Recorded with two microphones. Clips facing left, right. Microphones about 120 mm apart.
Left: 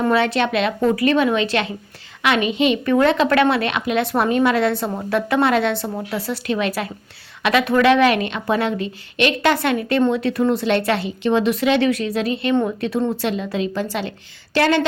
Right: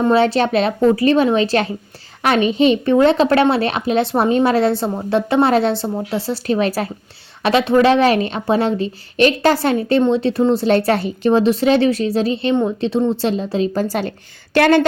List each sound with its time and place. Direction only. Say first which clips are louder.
0.0 s a woman's voice: right 4 dB; 30° right (ahead or behind); by 14.8 s 50° right (ahead or behind)